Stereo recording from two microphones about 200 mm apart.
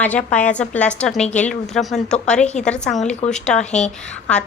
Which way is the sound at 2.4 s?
35° left (ahead or behind).